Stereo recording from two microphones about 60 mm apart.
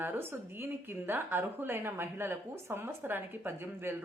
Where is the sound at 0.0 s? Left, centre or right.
Right.